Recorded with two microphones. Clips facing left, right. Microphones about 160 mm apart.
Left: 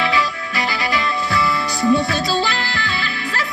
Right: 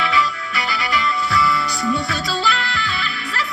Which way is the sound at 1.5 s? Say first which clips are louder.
Left 4 dB; 40° left (ahead or behind).